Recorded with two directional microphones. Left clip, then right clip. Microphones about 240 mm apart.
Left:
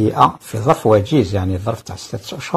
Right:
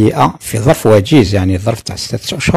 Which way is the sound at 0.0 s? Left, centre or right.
Right.